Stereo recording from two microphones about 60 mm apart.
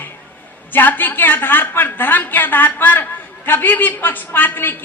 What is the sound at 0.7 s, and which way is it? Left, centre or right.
A woman's voice, left.